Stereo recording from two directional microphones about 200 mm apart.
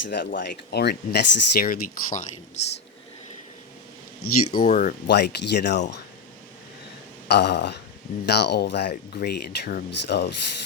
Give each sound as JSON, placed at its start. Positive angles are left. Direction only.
{"t": 0.1, "sound": "speech", "side_deg": 50}
{"t": 4.2, "sound": "speech", "side_deg": 90}
{"t": 4.5, "sound": "speech", "side_deg": 40}
{"t": 5.0, "sound": "speech", "side_deg": 55}
{"t": 7.3, "sound": "speech", "side_deg": 55}